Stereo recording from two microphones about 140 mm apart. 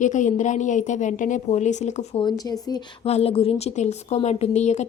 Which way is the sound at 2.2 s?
30° left (ahead or behind).